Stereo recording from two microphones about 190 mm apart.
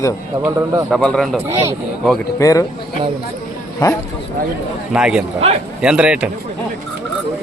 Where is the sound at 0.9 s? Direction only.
5° left (ahead or behind).